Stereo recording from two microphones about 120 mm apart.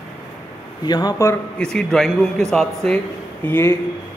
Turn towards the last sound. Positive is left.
turn(degrees=20)  # may be behind; listen again after turning